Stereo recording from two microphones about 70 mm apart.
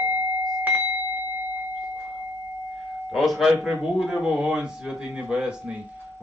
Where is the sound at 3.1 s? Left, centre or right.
Centre.